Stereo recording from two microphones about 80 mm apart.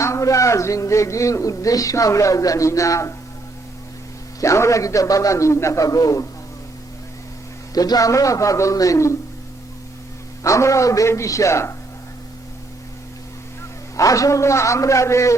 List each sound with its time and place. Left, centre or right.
0.0 s a man's voice: left
4.4 s a man's voice: left
7.7 s a man's voice: left
10.4 s a man's voice: left
13.9 s a man's voice: left